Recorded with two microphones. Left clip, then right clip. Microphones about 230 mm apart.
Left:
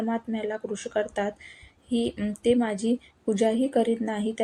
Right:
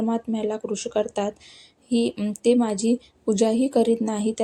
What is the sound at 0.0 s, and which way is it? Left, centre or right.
A woman's voice, right.